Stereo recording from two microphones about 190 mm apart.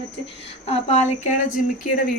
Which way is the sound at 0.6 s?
30° left (ahead or behind).